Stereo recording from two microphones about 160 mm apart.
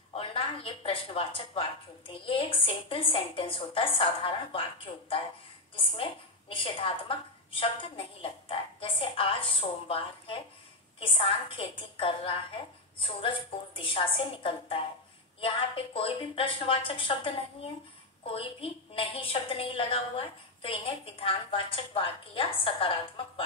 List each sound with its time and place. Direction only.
0.1 s a woman's voice: 35° left (ahead or behind)
6.5 s a woman's voice: 35° left (ahead or behind)